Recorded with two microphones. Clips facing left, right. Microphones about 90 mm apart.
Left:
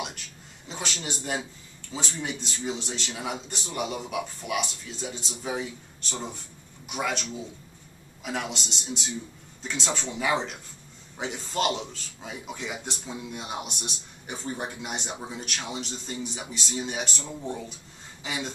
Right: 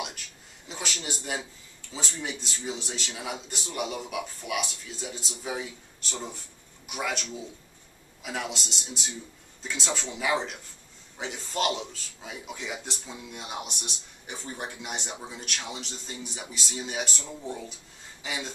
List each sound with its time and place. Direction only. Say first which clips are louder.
0.7 s a sound: left 1 dB; centre (ahead or behind)
1.0 s a man's voice: left 4 dB; centre (ahead or behind)
17.3 s speech: left 2 dB; 15° left (ahead or behind)
18.2 s speech: left 2 dB; centre (ahead or behind)